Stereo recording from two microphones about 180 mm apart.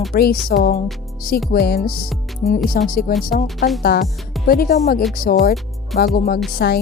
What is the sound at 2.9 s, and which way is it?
Speech, 50° left (ahead or behind).